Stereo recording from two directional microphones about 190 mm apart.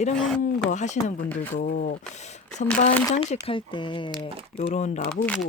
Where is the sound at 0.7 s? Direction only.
40° left (ahead or behind).